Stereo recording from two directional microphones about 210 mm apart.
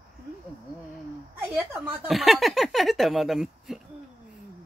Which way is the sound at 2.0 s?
Centre (ahead or behind).